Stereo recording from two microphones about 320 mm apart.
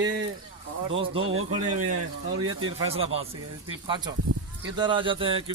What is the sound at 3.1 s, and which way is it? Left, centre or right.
Speech, centre.